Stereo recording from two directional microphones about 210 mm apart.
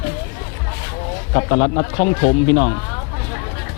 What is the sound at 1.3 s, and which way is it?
Speech, 25° left (ahead or behind).